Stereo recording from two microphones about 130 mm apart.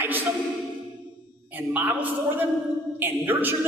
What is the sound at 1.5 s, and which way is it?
A woman's voice, 15° right (ahead or behind).